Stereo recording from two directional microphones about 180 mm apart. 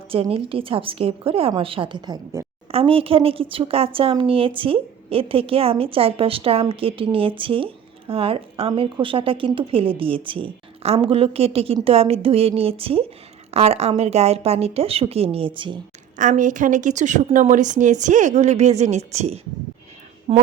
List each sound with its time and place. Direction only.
0.1 s a woman's voice: 30° right (ahead or behind)
16.1 s a woman's voice: 45° right (ahead or behind)